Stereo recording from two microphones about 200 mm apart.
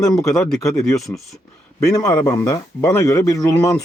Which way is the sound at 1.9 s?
20° left (ahead or behind).